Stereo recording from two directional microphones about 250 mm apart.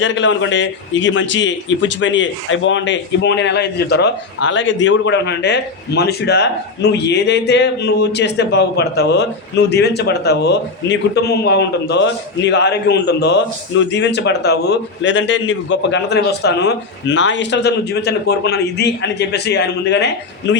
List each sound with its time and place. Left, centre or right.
0.0 s a man's voice: left